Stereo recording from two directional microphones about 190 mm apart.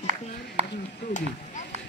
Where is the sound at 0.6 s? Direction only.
30° right (ahead or behind).